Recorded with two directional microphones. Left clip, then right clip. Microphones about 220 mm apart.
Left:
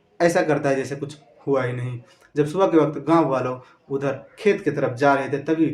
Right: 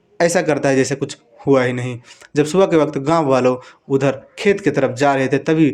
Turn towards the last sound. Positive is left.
turn(degrees=-45)  # may be behind; listen again after turning